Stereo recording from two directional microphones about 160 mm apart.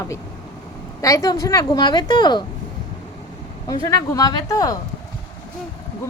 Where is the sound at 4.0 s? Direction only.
25° left (ahead or behind).